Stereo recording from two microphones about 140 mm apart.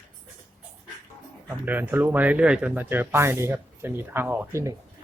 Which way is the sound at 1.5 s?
10° right (ahead or behind).